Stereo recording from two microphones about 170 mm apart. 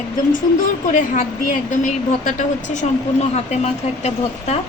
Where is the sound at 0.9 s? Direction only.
50° left (ahead or behind).